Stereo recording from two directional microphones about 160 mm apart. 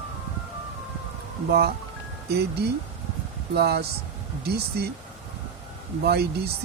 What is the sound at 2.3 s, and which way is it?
Speech, 90° right.